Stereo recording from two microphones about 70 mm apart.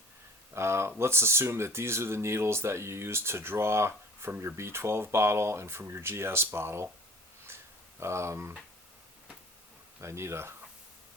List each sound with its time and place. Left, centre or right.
0.5 s speech: right
7.4 s a sound: right
10.0 s speech: right